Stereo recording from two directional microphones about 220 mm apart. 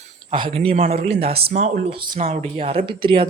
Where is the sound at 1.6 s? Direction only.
25° right (ahead or behind).